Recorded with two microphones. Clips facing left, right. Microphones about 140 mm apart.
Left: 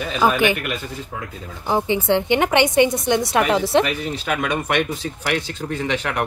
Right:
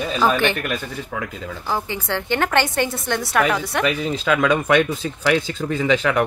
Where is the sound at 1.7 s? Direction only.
20° left (ahead or behind).